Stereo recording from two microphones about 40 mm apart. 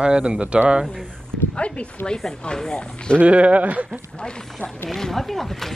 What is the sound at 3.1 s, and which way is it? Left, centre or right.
Speech, right.